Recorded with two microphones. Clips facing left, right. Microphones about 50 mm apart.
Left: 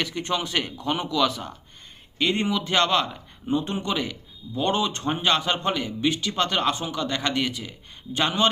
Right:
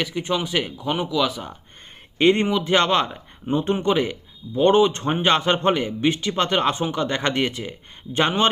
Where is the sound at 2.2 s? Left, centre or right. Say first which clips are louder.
Right 7 dB; right.